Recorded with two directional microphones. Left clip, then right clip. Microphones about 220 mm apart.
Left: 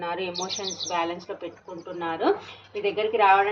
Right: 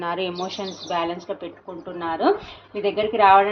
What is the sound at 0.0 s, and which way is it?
Speech, 40° right (ahead or behind).